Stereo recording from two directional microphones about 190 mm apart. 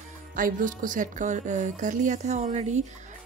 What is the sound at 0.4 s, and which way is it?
A woman's voice, 45° right (ahead or behind).